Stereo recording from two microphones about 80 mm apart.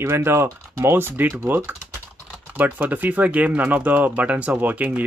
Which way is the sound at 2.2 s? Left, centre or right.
Centre.